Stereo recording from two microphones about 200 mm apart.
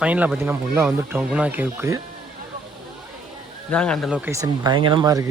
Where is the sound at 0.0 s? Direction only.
5° right (ahead or behind).